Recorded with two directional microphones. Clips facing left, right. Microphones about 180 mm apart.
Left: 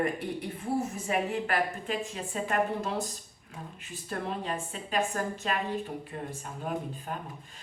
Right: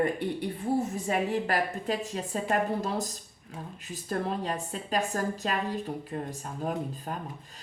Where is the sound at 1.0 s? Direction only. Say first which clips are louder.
Right 2 dB; 35° right (ahead or behind).